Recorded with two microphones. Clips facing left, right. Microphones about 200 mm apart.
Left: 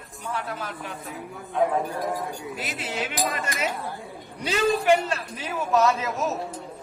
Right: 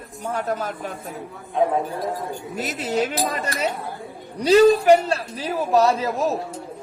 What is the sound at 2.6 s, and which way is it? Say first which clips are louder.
A man's voice: right 11 dB; 40° right (ahead or behind).